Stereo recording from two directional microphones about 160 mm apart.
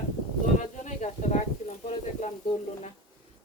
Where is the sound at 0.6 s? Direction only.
50° left (ahead or behind).